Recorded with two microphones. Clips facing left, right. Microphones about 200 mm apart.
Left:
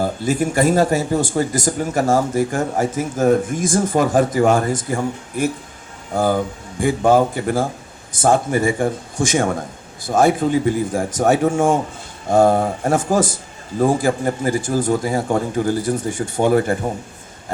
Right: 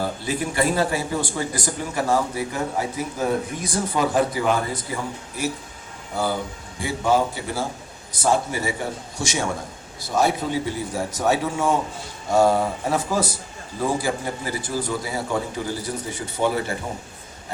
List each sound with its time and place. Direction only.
0.0 s speech: 45° left (ahead or behind)